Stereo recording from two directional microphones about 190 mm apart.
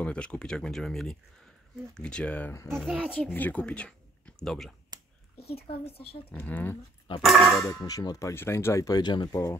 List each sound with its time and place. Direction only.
0.0 s speech: 5° left (ahead or behind)
2.8 s speech: 5° right (ahead or behind)
3.3 s speech: 10° left (ahead or behind)
5.4 s speech: 55° left (ahead or behind)
5.7 s speech: 30° left (ahead or behind)
6.3 s speech: 10° left (ahead or behind)
7.6 s speech: 20° left (ahead or behind)